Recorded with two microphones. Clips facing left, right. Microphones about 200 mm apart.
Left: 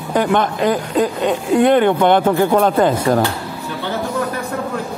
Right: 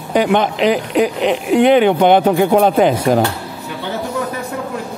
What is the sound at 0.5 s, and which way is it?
Speech, 75° right (ahead or behind).